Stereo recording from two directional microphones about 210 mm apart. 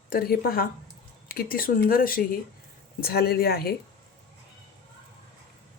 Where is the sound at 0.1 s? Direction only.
45° left (ahead or behind).